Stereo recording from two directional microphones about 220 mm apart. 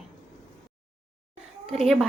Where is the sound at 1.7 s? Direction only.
Centre (ahead or behind).